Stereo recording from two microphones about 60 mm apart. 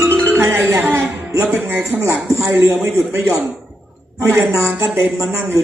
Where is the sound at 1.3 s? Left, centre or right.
Right.